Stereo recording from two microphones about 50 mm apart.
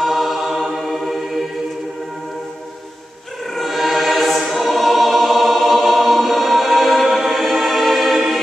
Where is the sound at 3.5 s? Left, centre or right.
Centre.